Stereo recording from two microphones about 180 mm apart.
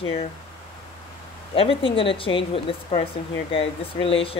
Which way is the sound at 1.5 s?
30° left (ahead or behind).